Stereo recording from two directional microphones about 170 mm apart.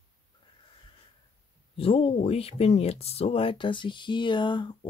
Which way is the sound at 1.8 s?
35° left (ahead or behind).